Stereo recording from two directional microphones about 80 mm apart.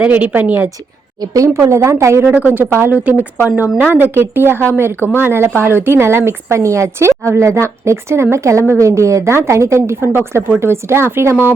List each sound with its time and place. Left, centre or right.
0.0 s speech: right
1.2 s speech: right
2.2 s speech: right
4.9 s speech: left
5.2 s speech: right